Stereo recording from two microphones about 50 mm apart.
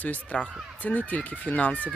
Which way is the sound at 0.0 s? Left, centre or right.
Left.